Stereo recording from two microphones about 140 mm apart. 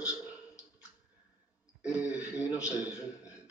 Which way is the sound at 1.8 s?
5° right (ahead or behind).